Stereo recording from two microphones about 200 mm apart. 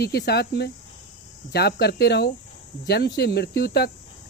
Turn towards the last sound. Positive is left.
turn(degrees=55)  # may be behind; listen again after turning